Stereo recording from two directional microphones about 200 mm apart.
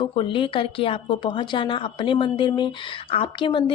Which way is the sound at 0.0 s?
25° left (ahead or behind).